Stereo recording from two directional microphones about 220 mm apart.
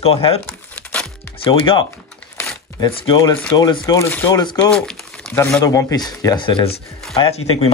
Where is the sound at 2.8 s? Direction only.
20° left (ahead or behind).